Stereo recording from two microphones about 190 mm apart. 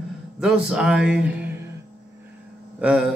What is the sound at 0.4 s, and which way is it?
A man's voice, centre (ahead or behind).